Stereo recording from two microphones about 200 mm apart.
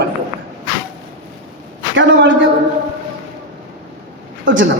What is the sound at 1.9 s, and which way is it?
Speech, 65° right (ahead or behind).